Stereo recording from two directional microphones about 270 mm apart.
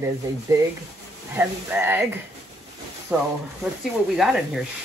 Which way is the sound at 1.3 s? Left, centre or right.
Centre.